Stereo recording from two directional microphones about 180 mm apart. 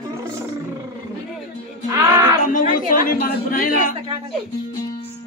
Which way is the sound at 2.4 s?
50° left (ahead or behind).